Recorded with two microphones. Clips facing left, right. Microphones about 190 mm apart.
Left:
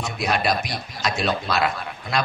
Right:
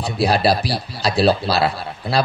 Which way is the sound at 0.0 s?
35° right (ahead or behind).